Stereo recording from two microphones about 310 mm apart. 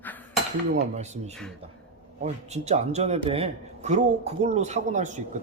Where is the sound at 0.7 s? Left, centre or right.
Right.